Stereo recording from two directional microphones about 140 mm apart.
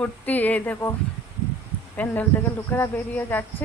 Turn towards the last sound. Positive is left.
turn(degrees=15)  # may be behind; listen again after turning